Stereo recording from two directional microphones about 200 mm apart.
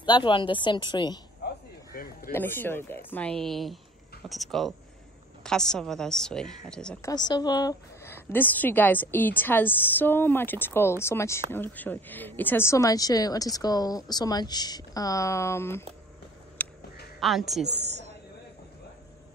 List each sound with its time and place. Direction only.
0.0 s a woman's voice: 25° left (ahead or behind)
2.3 s a woman's voice: 10° left (ahead or behind)
7.1 s a woman's voice: 20° left (ahead or behind)
16.6 s quack: 10° left (ahead or behind)
17.2 s a woman's voice: centre (ahead or behind)